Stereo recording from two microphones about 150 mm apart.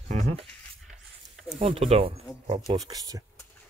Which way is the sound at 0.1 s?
50° right (ahead or behind).